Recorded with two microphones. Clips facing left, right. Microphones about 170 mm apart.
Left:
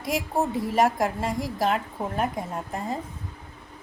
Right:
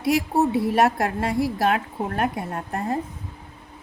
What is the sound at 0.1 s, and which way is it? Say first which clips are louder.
A woman's voice: right 5 dB; 70° right (ahead or behind).